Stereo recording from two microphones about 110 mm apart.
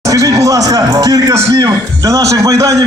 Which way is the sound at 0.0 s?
30° right (ahead or behind).